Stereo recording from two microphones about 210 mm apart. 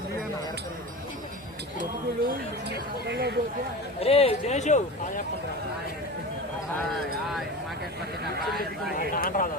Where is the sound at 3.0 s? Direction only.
50° right (ahead or behind).